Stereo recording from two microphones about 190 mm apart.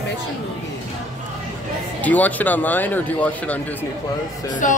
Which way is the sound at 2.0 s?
10° left (ahead or behind).